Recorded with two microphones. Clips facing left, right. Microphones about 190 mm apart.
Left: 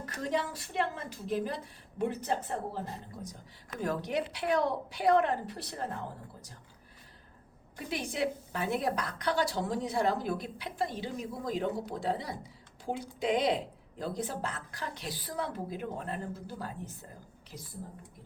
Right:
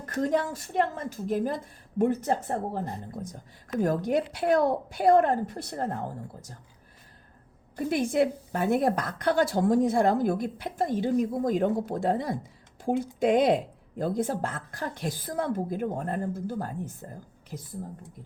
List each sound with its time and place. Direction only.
0.0 s a woman's voice: 50° right (ahead or behind)
7.8 s a woman's voice: 50° right (ahead or behind)